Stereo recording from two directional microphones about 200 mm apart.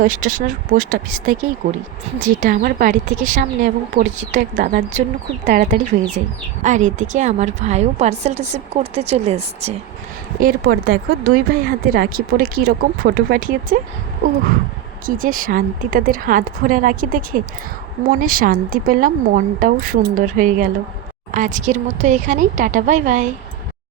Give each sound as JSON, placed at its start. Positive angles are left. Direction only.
{"t": 0.0, "sound": "speech", "side_deg": -40}
{"t": 10.4, "sound": "speech", "side_deg": -45}
{"t": 15.0, "sound": "speech", "side_deg": -45}